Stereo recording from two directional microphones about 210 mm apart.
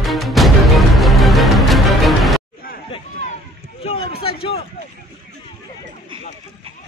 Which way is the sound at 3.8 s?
25° left (ahead or behind).